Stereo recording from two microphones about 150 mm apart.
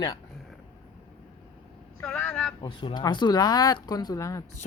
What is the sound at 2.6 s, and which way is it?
Speech, 30° left (ahead or behind).